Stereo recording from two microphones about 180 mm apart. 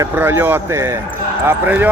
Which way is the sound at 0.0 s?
10° right (ahead or behind).